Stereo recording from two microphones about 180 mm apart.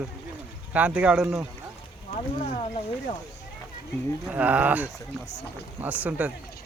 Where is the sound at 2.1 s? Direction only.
35° left (ahead or behind).